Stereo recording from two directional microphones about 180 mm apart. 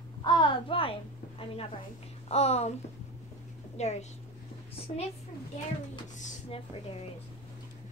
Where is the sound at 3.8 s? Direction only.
40° left (ahead or behind).